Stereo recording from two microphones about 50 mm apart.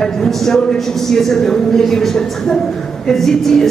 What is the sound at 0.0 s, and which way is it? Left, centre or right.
A woman's voice, centre.